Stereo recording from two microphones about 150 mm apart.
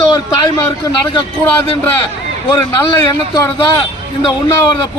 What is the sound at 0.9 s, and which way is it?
Speech, 25° left (ahead or behind).